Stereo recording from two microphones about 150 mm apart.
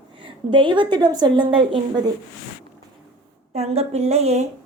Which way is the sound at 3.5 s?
45° right (ahead or behind).